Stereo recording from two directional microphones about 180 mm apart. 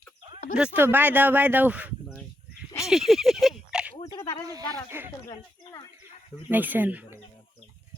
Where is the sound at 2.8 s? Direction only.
Centre (ahead or behind).